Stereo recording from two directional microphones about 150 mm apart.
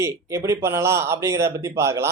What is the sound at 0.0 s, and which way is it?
A man's voice, 20° right (ahead or behind).